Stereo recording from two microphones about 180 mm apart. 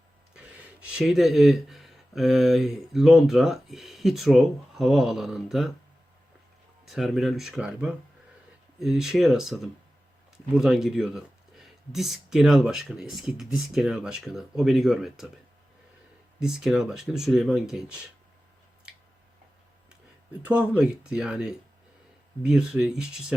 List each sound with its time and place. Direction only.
0.3 s speech: 5° right (ahead or behind)
6.8 s speech: centre (ahead or behind)
16.4 s speech: 5° right (ahead or behind)
20.4 s speech: 5° right (ahead or behind)